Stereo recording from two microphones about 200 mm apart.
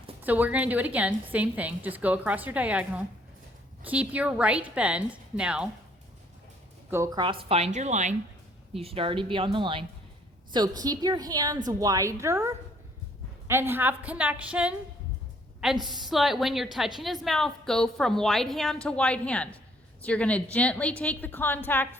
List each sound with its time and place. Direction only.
0.2 s a woman's voice: 10° right (ahead or behind)
6.9 s a woman's voice: 15° right (ahead or behind); by 21.8 s 10° left (ahead or behind)